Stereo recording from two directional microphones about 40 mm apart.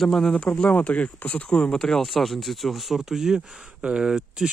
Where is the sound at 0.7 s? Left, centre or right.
Left.